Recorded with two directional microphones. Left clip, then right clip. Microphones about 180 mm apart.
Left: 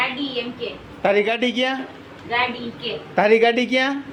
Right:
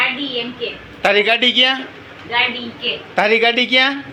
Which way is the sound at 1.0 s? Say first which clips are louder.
Right 5 dB; 15° left (ahead or behind).